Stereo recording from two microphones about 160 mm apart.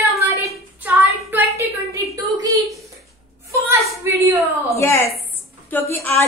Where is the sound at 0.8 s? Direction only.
10° right (ahead or behind).